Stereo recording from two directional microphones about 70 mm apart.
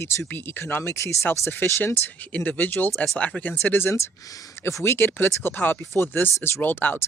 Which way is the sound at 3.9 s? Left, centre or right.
Left.